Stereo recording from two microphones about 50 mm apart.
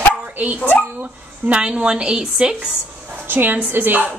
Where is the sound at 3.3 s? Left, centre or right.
Right.